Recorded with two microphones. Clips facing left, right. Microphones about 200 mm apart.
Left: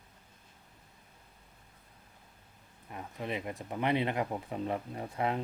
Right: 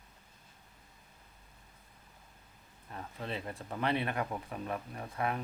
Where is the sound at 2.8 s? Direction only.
15° left (ahead or behind).